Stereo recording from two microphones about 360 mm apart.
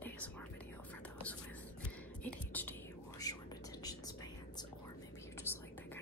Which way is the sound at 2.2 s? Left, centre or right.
Centre.